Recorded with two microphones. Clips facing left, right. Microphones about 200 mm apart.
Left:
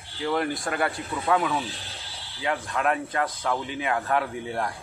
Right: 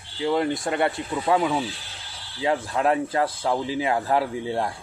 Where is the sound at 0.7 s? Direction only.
30° right (ahead or behind).